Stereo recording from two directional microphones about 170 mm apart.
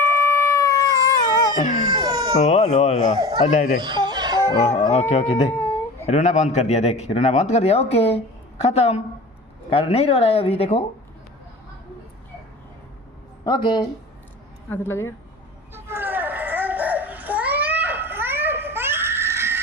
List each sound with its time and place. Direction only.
0.0 s howl: 15° left (ahead or behind)
1.3 s baby cry: 20° left (ahead or behind)
1.5 s baby cry: 45° left (ahead or behind)
1.9 s cat: 20° right (ahead or behind)
2.4 s a man's voice: 40° left (ahead or behind)
3.4 s speech: 50° left (ahead or behind)
3.8 s chicken: 25° right (ahead or behind)
4.5 s a man's voice: 45° left (ahead or behind)
13.4 s speech: 25° left (ahead or behind)
14.7 s a woman's voice: 15° left (ahead or behind)
15.7 s a sound: 15° right (ahead or behind)